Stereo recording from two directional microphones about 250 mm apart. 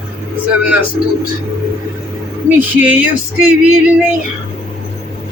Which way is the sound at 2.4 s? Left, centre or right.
Centre.